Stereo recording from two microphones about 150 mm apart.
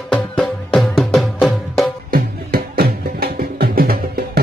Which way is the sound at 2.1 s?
80° right.